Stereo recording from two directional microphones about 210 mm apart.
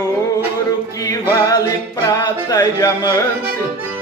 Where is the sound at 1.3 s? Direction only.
15° left (ahead or behind).